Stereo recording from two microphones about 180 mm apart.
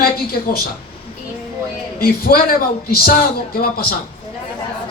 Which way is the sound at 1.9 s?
55° left (ahead or behind).